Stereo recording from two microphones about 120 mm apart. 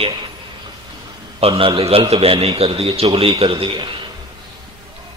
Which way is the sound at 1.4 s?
50° right (ahead or behind).